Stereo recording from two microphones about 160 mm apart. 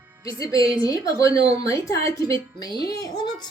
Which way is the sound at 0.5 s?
30° right (ahead or behind).